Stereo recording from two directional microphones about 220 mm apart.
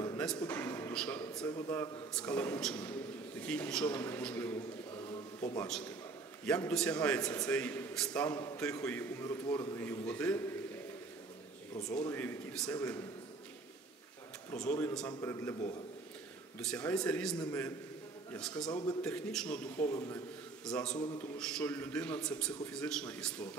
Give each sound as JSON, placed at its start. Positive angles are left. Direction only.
{"t": 0.5, "sound": "a sound", "side_deg": 10}
{"t": 1.5, "sound": "a man's voice", "side_deg": 10}
{"t": 4.9, "sound": "a sound", "side_deg": 20}
{"t": 5.7, "sound": "a man's voice", "side_deg": 5}
{"t": 11.7, "sound": "a man's voice", "side_deg": 15}
{"t": 14.5, "sound": "a man's voice", "side_deg": 10}
{"t": 18.7, "sound": "speech", "side_deg": 20}
{"t": 19.0, "sound": "a man's voice", "side_deg": 5}
{"t": 19.9, "sound": "a man's voice", "side_deg": 15}
{"t": 20.6, "sound": "a man's voice", "side_deg": 5}